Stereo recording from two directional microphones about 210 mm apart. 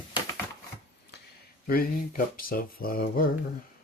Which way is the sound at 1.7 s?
45° left (ahead or behind).